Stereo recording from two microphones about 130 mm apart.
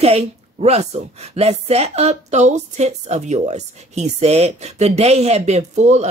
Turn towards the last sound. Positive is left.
turn(degrees=-60)  # may be behind; listen again after turning